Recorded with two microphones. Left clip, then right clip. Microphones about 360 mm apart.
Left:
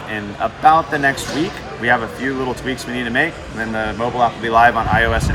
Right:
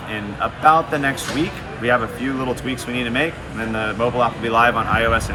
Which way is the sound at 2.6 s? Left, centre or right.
Centre.